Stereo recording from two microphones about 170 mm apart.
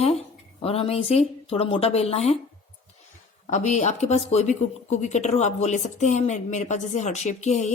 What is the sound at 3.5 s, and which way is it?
Speech, 45° left (ahead or behind).